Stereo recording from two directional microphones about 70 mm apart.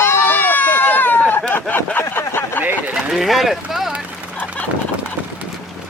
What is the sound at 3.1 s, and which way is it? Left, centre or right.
Speech, centre.